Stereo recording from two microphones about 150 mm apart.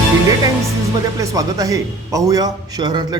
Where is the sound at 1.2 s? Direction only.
25° right (ahead or behind).